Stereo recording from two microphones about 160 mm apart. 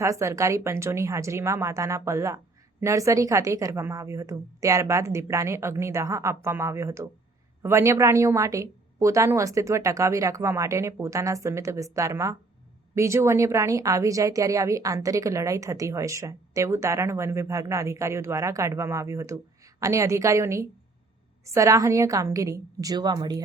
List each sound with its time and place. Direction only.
0.0 s a woman's voice: 20° right (ahead or behind)